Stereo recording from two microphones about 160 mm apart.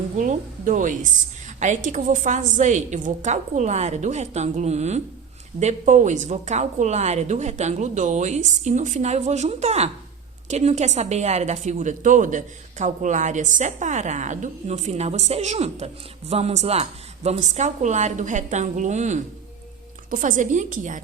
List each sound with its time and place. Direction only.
0.2 s a woman's voice: 55° right (ahead or behind)